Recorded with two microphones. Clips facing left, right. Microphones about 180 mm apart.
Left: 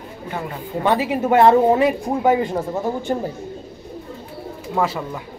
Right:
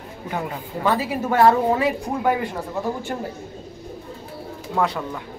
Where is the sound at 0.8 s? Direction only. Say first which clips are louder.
Left 3 dB; 20° left (ahead or behind).